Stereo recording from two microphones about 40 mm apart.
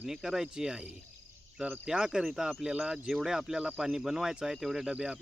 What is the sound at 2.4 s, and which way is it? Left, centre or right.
Cricket, right.